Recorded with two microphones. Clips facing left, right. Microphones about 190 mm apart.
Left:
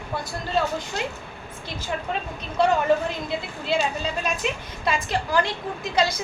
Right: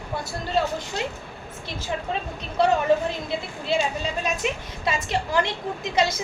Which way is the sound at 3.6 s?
20° right (ahead or behind).